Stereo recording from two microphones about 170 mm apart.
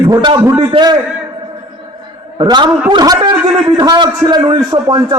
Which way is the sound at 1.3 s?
25° right (ahead or behind).